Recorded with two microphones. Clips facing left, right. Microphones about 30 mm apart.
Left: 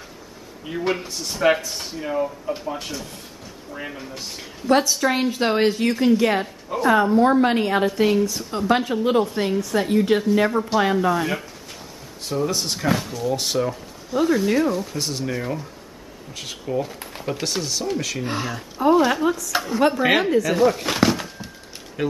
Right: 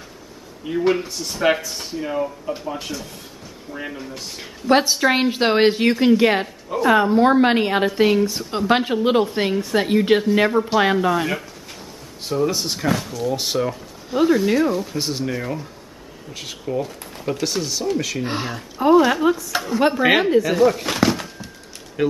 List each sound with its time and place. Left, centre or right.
0.7 s speech: centre
4.6 s a woman's voice: right
10.5 s speech: centre
10.8 s a woman's voice: right
11.1 s speech: centre
13.2 s speech: centre
15.3 s speech: centre
18.2 s speech: centre
19.8 s speech: centre
20.5 s a sound: centre